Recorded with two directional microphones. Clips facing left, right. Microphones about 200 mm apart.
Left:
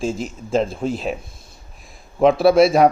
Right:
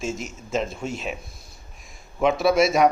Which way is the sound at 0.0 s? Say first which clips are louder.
Left 6 dB; 30° left (ahead or behind).